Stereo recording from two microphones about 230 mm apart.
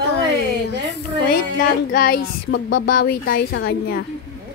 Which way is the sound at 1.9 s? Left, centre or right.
Left.